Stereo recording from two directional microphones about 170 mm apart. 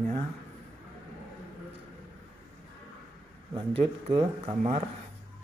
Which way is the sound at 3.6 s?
35° right (ahead or behind).